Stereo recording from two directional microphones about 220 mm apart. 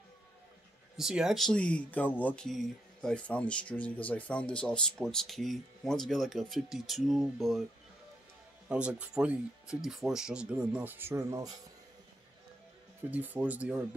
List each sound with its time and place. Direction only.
0.9 s speech: centre (ahead or behind)
8.6 s speech: 5° right (ahead or behind)
13.1 s speech: 10° right (ahead or behind)